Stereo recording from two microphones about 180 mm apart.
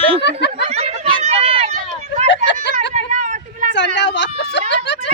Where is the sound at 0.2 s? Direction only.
75° left (ahead or behind).